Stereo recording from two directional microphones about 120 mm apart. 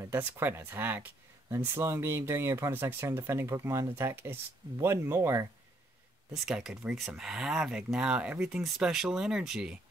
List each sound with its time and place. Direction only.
0.1 s speech: 15° right (ahead or behind)
6.3 s speech: 5° right (ahead or behind)